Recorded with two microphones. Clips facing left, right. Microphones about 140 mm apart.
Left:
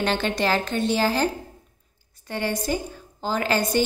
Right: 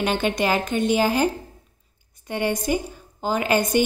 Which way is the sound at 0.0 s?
15° right (ahead or behind).